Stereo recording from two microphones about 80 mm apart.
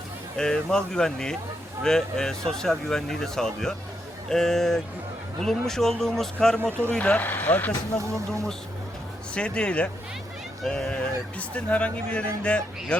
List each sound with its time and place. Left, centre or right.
0.3 s speech: centre
7.9 s speech: centre
9.3 s speech: centre